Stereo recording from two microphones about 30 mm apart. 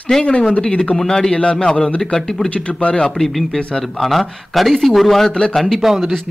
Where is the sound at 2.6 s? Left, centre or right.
Left.